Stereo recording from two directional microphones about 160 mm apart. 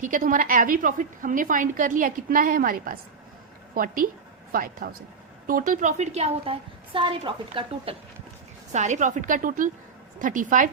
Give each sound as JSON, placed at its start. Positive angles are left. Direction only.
{"t": 0.0, "sound": "a woman's voice", "side_deg": -55}
{"t": 8.7, "sound": "a woman's voice", "side_deg": -45}